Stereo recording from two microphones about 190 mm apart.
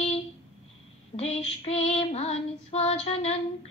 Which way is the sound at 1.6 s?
30° left (ahead or behind).